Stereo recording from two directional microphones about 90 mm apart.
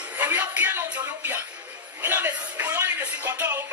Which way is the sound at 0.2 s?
20° right (ahead or behind).